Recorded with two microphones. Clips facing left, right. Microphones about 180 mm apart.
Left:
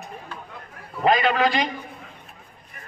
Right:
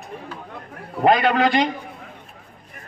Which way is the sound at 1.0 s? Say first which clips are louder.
Right 3 dB; 60° right (ahead or behind).